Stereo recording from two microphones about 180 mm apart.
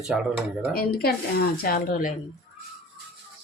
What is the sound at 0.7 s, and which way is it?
Speech, 60° left (ahead or behind).